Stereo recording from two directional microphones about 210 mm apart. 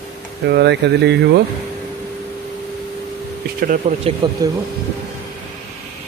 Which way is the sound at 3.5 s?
45° right (ahead or behind).